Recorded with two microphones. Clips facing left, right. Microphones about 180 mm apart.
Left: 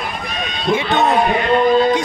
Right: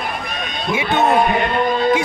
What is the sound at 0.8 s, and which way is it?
Speech, 10° right (ahead or behind).